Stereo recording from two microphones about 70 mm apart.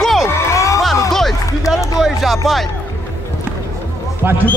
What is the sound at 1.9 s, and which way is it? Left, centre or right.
Speech, centre.